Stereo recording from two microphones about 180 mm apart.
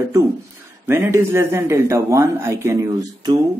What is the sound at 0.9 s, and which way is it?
Speech, 15° right (ahead or behind).